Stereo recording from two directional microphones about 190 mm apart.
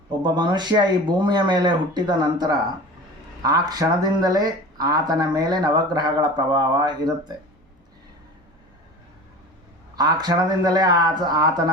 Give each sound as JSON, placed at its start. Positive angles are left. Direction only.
{"t": 0.2, "sound": "speech", "side_deg": -25}
{"t": 9.9, "sound": "speech", "side_deg": -20}